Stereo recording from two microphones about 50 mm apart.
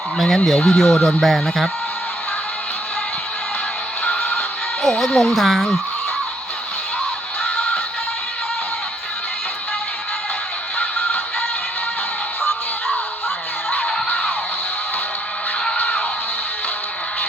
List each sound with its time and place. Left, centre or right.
0.2 s speech: centre
4.8 s speech: centre
10.8 s music: left
15.8 s music: left